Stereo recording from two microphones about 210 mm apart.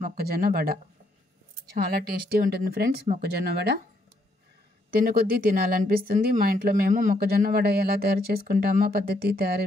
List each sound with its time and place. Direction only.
0.0 s speech: 45° right (ahead or behind)
1.9 s speech: 45° right (ahead or behind)
4.9 s speech: 45° right (ahead or behind)